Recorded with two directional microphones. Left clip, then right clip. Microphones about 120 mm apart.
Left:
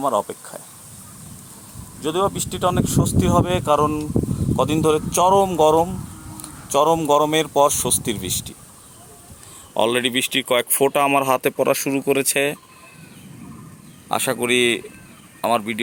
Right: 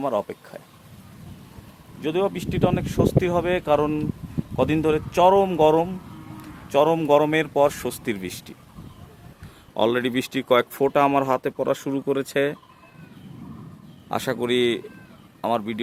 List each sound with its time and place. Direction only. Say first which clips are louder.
0.0 s speech: left 4 dB; 15° left (ahead or behind)
2.0 s speech: left 3 dB; 15° left (ahead or behind)
9.7 s speech: left 3 dB; 10° left (ahead or behind)
10.5 s speech: right 1 dB; 30° left (ahead or behind)
11.8 s speech: left 5 dB; 15° left (ahead or behind)
14.1 s speech: left 4 dB; centre (ahead or behind)